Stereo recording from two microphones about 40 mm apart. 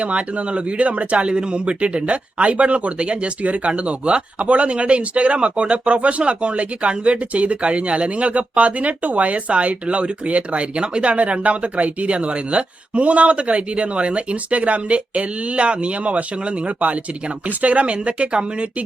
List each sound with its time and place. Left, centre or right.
0.0 s speech: right